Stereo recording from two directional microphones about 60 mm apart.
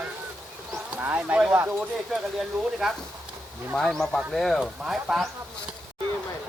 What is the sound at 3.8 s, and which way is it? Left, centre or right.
Speech, centre.